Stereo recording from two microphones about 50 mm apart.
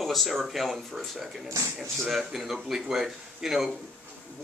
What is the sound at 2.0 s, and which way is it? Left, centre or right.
Speech, centre.